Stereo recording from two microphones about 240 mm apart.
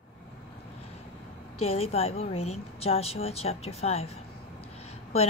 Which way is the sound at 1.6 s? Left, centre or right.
Left.